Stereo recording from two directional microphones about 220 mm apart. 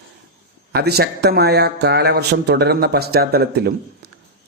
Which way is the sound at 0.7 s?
45° right (ahead or behind).